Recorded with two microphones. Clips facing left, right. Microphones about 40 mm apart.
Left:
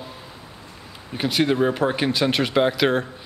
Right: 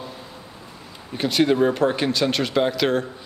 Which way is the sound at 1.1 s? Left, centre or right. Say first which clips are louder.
Right 2 dB; centre.